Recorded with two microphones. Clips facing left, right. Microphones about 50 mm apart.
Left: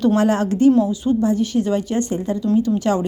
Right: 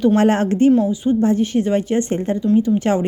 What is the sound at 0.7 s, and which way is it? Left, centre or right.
Speech, centre.